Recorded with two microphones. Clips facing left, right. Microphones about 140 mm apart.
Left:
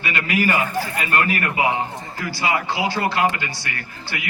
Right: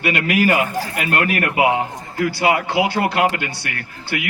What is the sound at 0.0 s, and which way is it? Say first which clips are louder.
A man's voice: right 4 dB; 70° right (ahead or behind).